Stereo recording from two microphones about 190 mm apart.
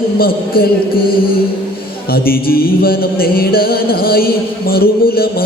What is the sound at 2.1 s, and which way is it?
Music, 50° left (ahead or behind).